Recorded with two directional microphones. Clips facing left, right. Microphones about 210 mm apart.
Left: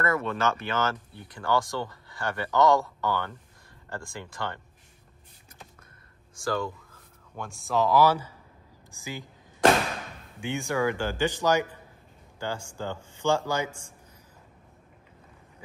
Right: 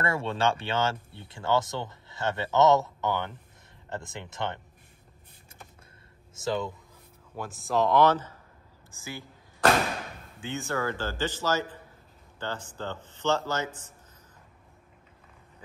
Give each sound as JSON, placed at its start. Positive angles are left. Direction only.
{"t": 0.0, "sound": "speech", "side_deg": -30}
{"t": 6.3, "sound": "speech", "side_deg": -20}
{"t": 7.3, "sound": "speech", "side_deg": 0}
{"t": 10.4, "sound": "speech", "side_deg": 15}